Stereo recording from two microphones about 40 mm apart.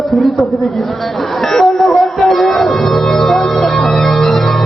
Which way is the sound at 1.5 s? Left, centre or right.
Centre.